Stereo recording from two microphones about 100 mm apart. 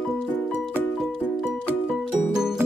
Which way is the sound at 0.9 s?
Centre (ahead or behind).